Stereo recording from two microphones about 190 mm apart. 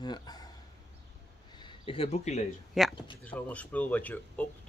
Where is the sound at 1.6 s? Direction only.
30° left (ahead or behind).